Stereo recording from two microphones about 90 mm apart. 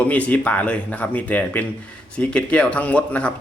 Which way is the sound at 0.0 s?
15° left (ahead or behind).